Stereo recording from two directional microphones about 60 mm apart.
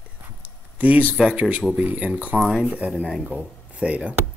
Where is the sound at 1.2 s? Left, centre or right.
Right.